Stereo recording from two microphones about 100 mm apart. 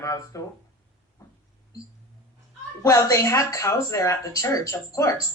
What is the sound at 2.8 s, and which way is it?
Speech, 35° left (ahead or behind).